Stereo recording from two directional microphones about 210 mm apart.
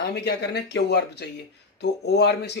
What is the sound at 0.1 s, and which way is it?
Speech, 50° left (ahead or behind).